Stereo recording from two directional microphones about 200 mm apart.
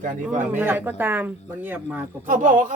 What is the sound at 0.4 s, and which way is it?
Speech, 10° right (ahead or behind).